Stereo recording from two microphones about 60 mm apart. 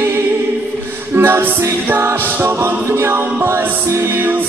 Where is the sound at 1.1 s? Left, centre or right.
Right.